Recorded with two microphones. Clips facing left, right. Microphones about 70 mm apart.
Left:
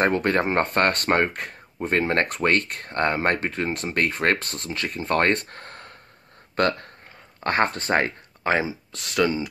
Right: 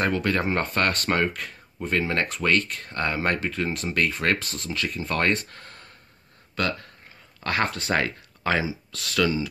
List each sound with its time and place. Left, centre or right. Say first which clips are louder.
0.0 s speech: left 3 dB; left
7.3 s speech: left 3 dB; left